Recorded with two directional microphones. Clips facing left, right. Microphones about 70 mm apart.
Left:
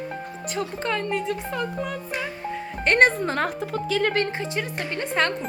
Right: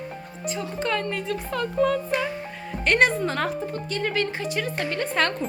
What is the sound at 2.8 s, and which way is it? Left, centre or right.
Speech, left.